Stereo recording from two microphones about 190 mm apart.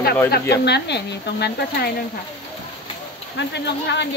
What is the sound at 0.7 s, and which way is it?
Speech, 60° left (ahead or behind).